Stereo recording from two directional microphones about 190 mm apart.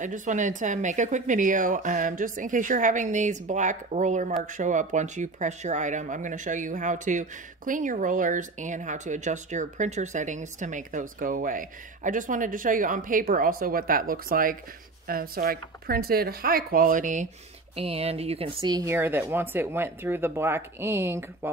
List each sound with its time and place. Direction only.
0.0 s speech: 40° right (ahead or behind); by 21.5 s 10° right (ahead or behind)